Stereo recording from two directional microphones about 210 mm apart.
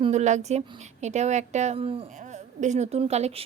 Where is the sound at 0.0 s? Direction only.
35° right (ahead or behind).